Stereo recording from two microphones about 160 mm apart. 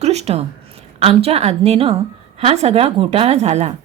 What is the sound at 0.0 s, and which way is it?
A woman's voice, 40° right (ahead or behind).